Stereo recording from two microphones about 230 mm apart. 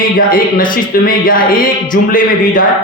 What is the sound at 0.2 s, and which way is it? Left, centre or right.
Speech, left.